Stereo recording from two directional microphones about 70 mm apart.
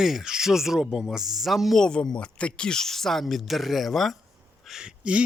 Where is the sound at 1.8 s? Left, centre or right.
Centre.